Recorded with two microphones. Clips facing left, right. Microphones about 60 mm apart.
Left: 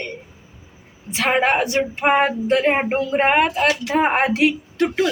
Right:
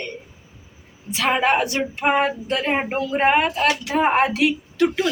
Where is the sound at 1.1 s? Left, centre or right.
Left.